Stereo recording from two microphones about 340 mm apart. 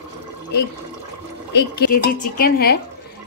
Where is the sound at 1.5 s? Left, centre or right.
Left.